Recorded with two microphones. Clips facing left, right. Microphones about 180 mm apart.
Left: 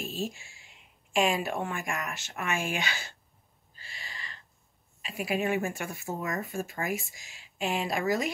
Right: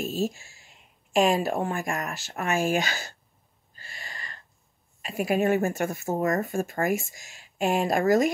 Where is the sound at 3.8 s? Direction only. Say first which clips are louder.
Right 3 dB; 50° right (ahead or behind).